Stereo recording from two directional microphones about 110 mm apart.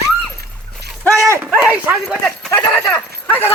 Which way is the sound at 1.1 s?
25° right (ahead or behind).